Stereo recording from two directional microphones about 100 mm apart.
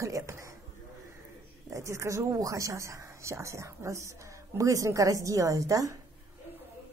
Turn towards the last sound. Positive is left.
turn(degrees=-35)  # may be behind; listen again after turning